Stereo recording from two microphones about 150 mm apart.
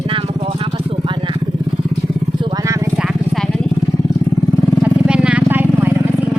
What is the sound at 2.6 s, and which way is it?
Vehicle, 20° right (ahead or behind).